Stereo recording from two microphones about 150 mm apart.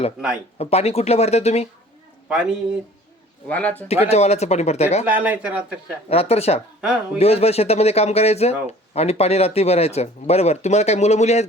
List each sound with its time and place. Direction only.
0.6 s speech: 45° left (ahead or behind)
2.3 s speech: 5° right (ahead or behind)
3.4 s speech: 10° left (ahead or behind)
3.8 s speech: 45° left (ahead or behind)
5.0 s speech: 10° right (ahead or behind)
6.1 s speech: 40° left (ahead or behind)
6.8 s speech: 10° right (ahead or behind)
7.2 s speech: 45° left (ahead or behind)